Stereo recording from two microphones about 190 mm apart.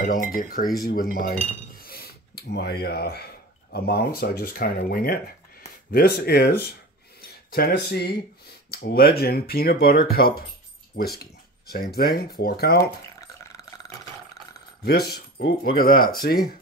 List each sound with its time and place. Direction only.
0.0 s speech: 45° left (ahead or behind)
1.9 s a sound: 55° left (ahead or behind)
3.7 s speech: 55° left (ahead or behind)
13.4 s burping: 20° left (ahead or behind)
14.8 s speech: 55° left (ahead or behind)